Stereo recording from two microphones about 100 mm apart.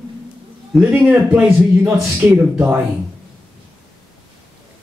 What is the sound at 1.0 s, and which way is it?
A man's voice, 15° right (ahead or behind).